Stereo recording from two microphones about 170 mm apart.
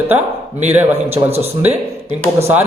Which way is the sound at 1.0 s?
35° right (ahead or behind).